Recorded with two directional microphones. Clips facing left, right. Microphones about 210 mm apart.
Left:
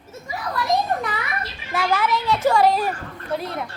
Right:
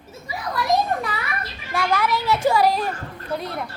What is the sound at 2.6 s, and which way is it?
Speech, centre (ahead or behind).